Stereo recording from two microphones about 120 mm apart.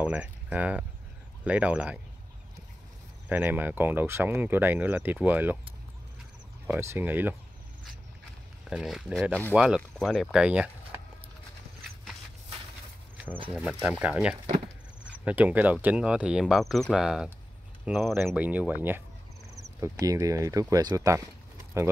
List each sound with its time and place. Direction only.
0.0 s speech: 10° right (ahead or behind)
3.3 s speech: 15° right (ahead or behind)
6.7 s speech: 20° right (ahead or behind)
8.6 s speech: 5° right (ahead or behind)
9.3 s speech: 15° left (ahead or behind)
9.8 s speech: 5° left (ahead or behind)
10.3 s speech: 10° right (ahead or behind)
13.5 s speech: centre (ahead or behind)
19.5 s speech: 25° right (ahead or behind)